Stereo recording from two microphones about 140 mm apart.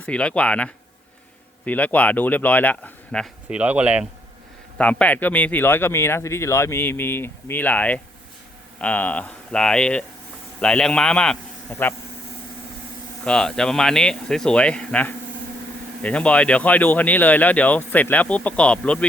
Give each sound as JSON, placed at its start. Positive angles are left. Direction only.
{"t": 0.0, "sound": "speech", "side_deg": 10}
{"t": 3.5, "sound": "speech", "side_deg": -10}
{"t": 4.8, "sound": "a man's voice", "side_deg": 10}
{"t": 13.2, "sound": "speech", "side_deg": 5}